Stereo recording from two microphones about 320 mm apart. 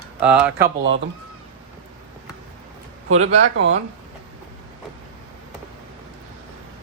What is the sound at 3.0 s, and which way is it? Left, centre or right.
Speech, right.